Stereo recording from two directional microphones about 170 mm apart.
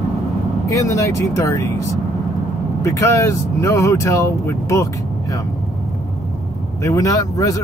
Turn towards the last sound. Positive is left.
turn(degrees=20)  # may be behind; listen again after turning